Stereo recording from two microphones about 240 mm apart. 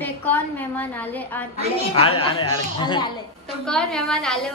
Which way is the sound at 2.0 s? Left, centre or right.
Left.